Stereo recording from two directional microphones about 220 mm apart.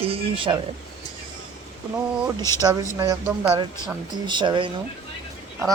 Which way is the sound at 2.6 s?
15° right (ahead or behind).